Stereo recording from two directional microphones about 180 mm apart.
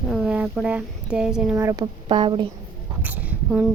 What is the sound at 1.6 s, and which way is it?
Speech, 15° right (ahead or behind).